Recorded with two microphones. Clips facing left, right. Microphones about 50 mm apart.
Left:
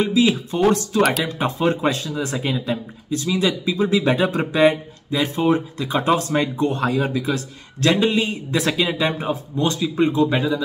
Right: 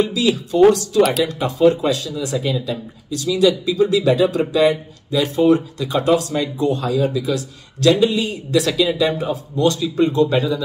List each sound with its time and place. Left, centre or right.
0.0 s speech: left